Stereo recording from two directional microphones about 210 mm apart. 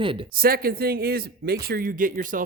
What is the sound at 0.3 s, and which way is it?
Speech, 45° right (ahead or behind).